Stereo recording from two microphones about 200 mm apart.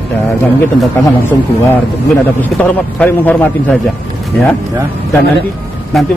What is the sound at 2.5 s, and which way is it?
Speech, 5° left (ahead or behind).